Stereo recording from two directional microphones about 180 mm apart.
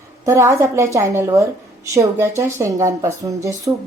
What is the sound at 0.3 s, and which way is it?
Speech, 15° right (ahead or behind).